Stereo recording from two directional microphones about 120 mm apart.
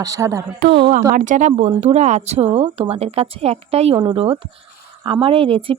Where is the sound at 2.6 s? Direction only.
55° right (ahead or behind).